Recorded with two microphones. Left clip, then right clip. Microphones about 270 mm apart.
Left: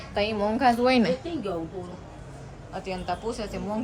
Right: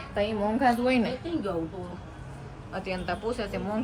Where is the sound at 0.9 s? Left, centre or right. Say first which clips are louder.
Left 4 dB; left.